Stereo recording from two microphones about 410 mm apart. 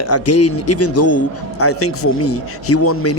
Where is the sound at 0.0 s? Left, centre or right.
Left.